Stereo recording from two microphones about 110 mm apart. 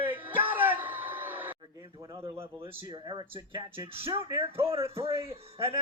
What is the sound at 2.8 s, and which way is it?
Speech, 40° right (ahead or behind).